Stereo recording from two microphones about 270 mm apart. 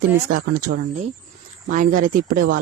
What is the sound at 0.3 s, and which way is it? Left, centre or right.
Speech, right.